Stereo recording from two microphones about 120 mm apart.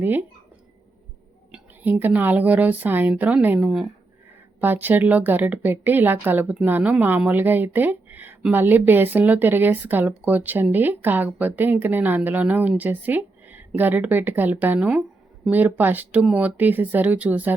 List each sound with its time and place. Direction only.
0.0 s speech: 15° right (ahead or behind)
1.5 s speech: 15° right (ahead or behind)